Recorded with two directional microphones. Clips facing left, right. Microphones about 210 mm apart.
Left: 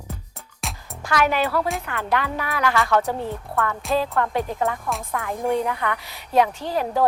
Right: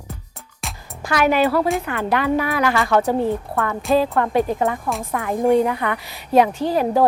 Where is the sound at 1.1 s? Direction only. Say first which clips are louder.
Right 4 dB; 10° right (ahead or behind).